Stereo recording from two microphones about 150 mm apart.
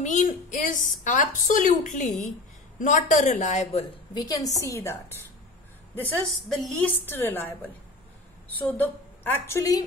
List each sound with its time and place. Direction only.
0.0 s a woman's voice: 55° left (ahead or behind)
4.1 s a woman's voice: 25° left (ahead or behind)
6.2 s a woman's voice: centre (ahead or behind)
7.1 s a woman's voice: 15° left (ahead or behind)